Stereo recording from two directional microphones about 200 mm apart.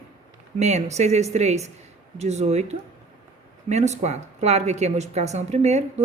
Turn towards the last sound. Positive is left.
turn(degrees=-35)  # may be behind; listen again after turning